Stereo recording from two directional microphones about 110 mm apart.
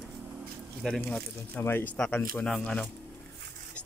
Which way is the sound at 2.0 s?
10° left (ahead or behind).